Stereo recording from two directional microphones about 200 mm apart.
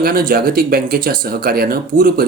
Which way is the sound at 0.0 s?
45° right (ahead or behind).